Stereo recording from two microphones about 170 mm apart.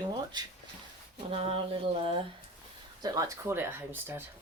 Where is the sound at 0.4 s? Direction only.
25° right (ahead or behind).